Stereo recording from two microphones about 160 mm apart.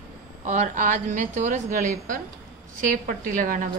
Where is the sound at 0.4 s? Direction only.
55° right (ahead or behind).